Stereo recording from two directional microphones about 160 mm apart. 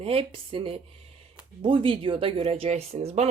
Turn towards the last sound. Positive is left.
turn(degrees=-45)  # may be behind; listen again after turning